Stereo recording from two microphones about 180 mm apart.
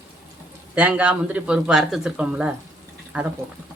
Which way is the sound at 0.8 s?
5° right (ahead or behind).